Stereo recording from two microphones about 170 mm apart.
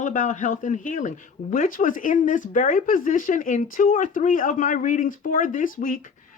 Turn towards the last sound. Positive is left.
turn(degrees=55)  # may be behind; listen again after turning